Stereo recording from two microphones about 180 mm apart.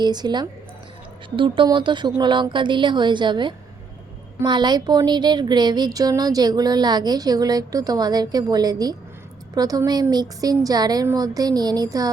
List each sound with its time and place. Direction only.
0.0 s speech: 25° right (ahead or behind)